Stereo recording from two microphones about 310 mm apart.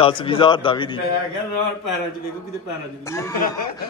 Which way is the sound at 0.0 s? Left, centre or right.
Centre.